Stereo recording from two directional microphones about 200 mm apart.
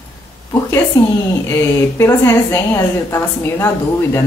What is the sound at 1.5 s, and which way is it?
A woman's voice, 15° left (ahead or behind).